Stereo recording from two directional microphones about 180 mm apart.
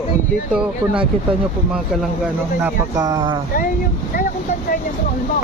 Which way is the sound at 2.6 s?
20° right (ahead or behind).